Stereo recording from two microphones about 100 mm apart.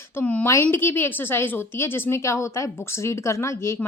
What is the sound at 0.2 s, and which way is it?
A woman's voice, 10° left (ahead or behind).